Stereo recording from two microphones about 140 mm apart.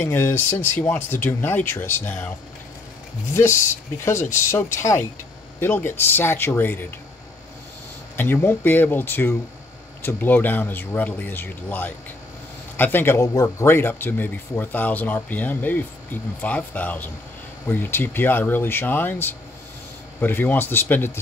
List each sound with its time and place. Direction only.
0.0 s speech: 20° left (ahead or behind)
4.5 s speech: 20° left (ahead or behind)
8.2 s speech: 15° left (ahead or behind)